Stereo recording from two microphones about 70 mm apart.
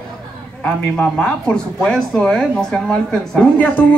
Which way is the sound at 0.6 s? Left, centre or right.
Centre.